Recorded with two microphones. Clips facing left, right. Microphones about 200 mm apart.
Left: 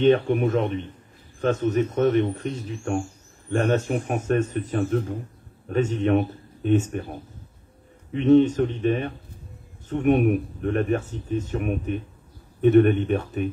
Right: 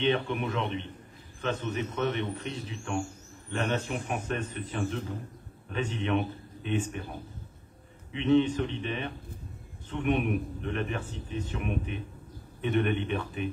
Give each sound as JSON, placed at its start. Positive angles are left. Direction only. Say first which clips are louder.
{"t": 0.0, "sound": "a man's voice", "louder": "left 9 dB", "side_deg": 45}